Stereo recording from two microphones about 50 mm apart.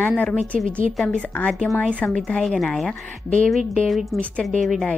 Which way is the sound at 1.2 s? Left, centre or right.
Left.